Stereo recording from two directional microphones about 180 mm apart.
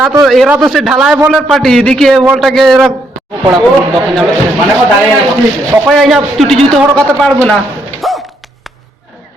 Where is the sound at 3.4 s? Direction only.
25° right (ahead or behind).